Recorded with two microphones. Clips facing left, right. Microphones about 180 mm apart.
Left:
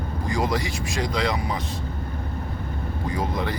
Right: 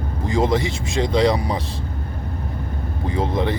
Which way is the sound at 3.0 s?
25° right (ahead or behind).